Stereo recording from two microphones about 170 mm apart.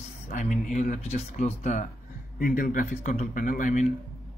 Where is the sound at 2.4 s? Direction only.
55° left (ahead or behind).